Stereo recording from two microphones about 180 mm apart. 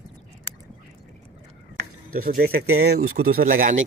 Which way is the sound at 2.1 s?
55° right (ahead or behind).